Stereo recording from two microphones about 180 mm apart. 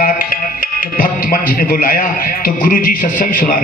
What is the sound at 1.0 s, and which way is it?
A man's voice, 55° left (ahead or behind).